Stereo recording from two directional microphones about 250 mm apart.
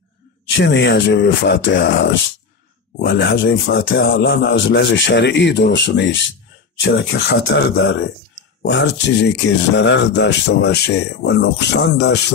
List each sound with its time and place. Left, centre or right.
0.5 s speech: left